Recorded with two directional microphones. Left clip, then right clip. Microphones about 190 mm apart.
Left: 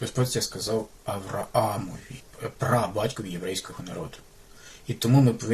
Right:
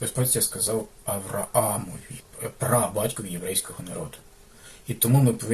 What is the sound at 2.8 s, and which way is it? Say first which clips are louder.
Speech: right 1 dB; 15° left (ahead or behind).